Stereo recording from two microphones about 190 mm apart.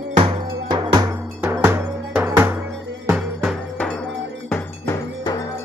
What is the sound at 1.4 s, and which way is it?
Music, 10° right (ahead or behind).